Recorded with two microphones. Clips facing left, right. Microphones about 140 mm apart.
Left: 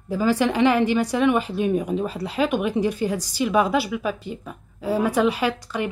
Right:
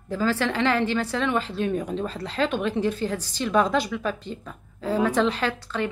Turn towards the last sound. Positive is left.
turn(degrees=10)  # may be behind; listen again after turning